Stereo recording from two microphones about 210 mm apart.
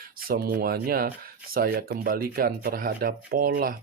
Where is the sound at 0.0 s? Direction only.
45° right (ahead or behind).